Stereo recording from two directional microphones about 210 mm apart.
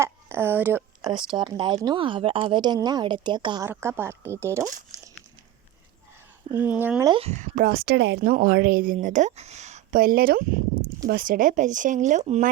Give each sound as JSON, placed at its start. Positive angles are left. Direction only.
{"t": 0.0, "sound": "a sound", "side_deg": -10}
{"t": 1.4, "sound": "speech", "side_deg": -20}
{"t": 6.5, "sound": "speech", "side_deg": -10}
{"t": 7.1, "sound": "speech", "side_deg": -30}